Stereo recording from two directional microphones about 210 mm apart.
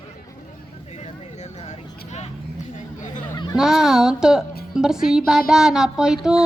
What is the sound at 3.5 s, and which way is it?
Child singing, centre (ahead or behind).